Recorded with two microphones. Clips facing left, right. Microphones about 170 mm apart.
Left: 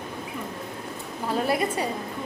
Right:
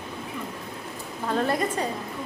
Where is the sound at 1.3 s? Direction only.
10° left (ahead or behind).